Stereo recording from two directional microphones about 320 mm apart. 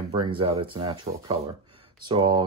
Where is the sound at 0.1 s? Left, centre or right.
Centre.